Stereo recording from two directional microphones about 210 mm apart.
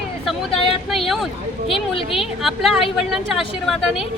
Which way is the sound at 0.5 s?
25° left (ahead or behind).